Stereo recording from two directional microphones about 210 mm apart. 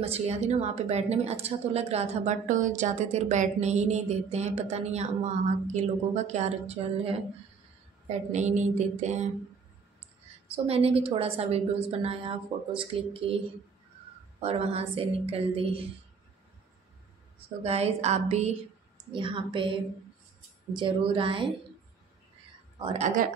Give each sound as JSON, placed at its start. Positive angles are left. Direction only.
{"t": 0.0, "sound": "a woman's voice", "side_deg": -30}
{"t": 8.3, "sound": "a woman's voice", "side_deg": -35}
{"t": 10.5, "sound": "a woman's voice", "side_deg": -30}
{"t": 14.4, "sound": "a woman's voice", "side_deg": -30}
{"t": 17.6, "sound": "a woman's voice", "side_deg": -30}
{"t": 20.7, "sound": "a woman's voice", "side_deg": -25}
{"t": 22.9, "sound": "a woman's voice", "side_deg": -35}